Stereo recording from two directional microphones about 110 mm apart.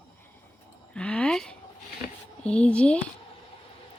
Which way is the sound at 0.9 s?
10° left (ahead or behind).